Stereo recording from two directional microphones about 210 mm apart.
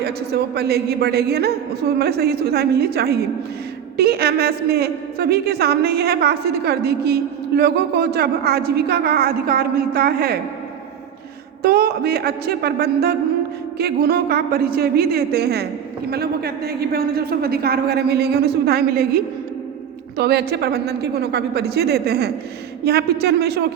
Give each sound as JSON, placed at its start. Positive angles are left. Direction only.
{"t": 0.0, "sound": "a woman's voice", "side_deg": -50}
{"t": 11.6, "sound": "a woman's voice", "side_deg": -45}
{"t": 20.1, "sound": "a woman's voice", "side_deg": -50}